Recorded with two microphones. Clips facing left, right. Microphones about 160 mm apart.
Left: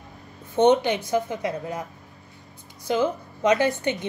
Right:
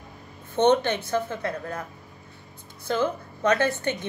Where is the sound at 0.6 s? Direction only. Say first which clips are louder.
Left 2 dB; 10° left (ahead or behind).